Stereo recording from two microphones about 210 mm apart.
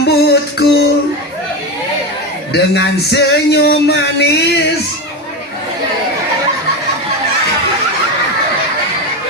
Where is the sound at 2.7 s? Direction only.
50° left (ahead or behind).